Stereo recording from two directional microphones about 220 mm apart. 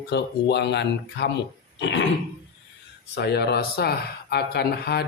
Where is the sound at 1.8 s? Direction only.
55° left (ahead or behind).